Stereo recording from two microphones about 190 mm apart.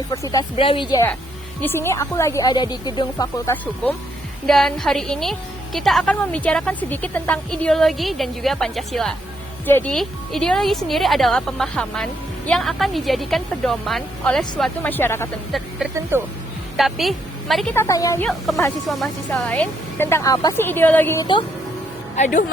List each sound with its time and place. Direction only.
0.1 s a woman's voice: 20° left (ahead or behind)
0.5 s a woman's voice: 30° left (ahead or behind); by 3.9 s 10° left (ahead or behind)
4.4 s a woman's voice: centre (ahead or behind)
15.8 s a woman's voice: centre (ahead or behind)
17.7 s a woman's voice: 15° left (ahead or behind)
18.9 s a woman's voice: centre (ahead or behind)
22.1 s speech: 40° left (ahead or behind)